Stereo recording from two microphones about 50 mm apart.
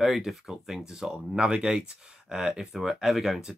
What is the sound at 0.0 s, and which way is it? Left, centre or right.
Speech, centre.